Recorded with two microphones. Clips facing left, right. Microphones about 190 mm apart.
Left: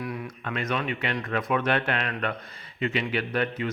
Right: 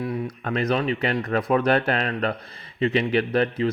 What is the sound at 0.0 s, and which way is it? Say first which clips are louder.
Speech: right 6 dB; 30° right (ahead or behind).